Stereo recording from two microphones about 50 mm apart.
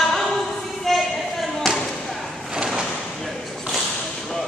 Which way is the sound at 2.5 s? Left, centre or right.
Centre.